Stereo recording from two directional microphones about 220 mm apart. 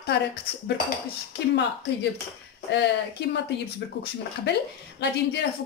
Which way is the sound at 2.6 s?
50° left (ahead or behind).